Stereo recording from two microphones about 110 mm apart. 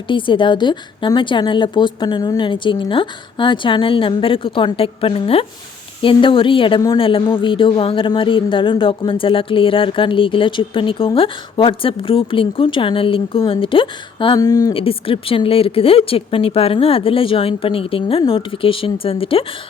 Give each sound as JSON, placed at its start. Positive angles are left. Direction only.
{"t": 0.1, "sound": "a woman's voice", "side_deg": 50}
{"t": 14.3, "sound": "speech", "side_deg": 35}
{"t": 14.7, "sound": "speech", "side_deg": 55}